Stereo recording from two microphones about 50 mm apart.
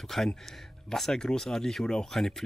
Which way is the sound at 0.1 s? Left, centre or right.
Centre.